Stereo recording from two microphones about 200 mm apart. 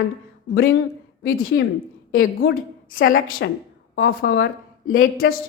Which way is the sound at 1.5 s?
60° left (ahead or behind).